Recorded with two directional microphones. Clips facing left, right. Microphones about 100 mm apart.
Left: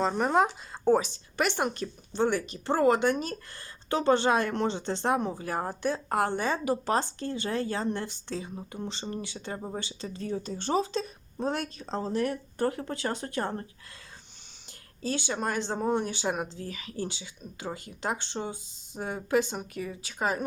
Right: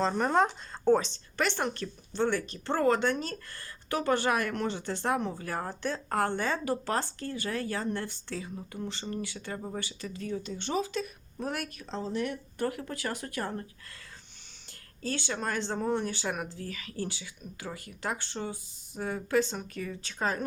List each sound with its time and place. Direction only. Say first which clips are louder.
0.0 s speech: left 1 dB; 5° left (ahead or behind); by 11.9 s 25° left (ahead or behind)
11.9 s speech: left 4 dB; 45° left (ahead or behind)
14.7 s speech: left 3 dB; 15° left (ahead or behind)